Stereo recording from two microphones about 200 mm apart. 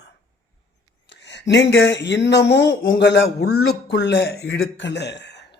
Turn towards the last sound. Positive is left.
turn(degrees=60)  # may be behind; listen again after turning